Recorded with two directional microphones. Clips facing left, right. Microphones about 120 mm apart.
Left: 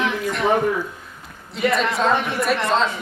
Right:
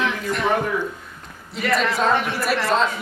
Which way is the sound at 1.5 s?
Centre (ahead or behind).